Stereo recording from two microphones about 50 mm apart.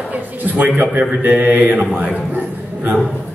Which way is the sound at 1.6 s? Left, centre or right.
Right.